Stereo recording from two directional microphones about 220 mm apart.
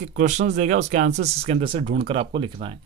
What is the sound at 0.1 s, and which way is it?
Speech, 35° right (ahead or behind).